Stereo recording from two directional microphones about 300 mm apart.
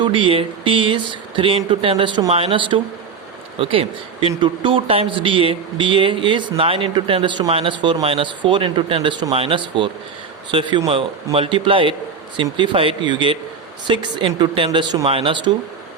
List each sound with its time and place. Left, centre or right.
0.0 s speech: centre